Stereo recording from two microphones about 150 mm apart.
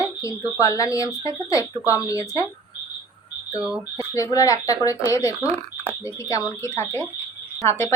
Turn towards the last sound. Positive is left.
turn(degrees=20)  # may be behind; listen again after turning